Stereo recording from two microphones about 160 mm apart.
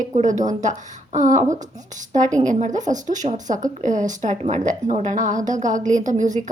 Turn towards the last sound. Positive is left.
turn(degrees=-50)  # may be behind; listen again after turning